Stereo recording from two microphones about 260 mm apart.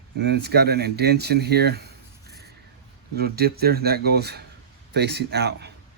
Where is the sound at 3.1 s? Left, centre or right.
Right.